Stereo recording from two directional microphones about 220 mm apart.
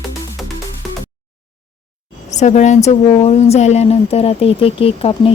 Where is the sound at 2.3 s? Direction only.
30° left (ahead or behind).